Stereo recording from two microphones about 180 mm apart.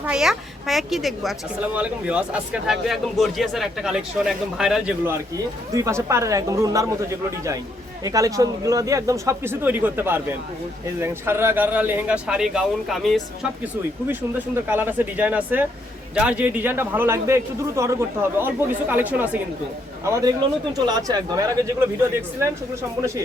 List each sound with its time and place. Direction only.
0.0 s a woman's voice: 5° right (ahead or behind)
14.1 s speech: 10° right (ahead or behind)